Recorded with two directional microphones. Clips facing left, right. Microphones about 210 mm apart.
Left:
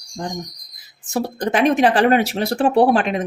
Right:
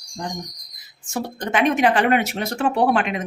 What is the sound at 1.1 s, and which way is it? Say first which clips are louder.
Speech: left 4 dB; 35° left (ahead or behind).